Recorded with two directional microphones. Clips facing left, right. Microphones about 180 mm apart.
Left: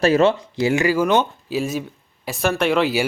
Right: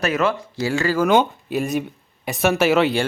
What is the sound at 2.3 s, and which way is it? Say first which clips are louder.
Speech: right 2 dB; 5° right (ahead or behind).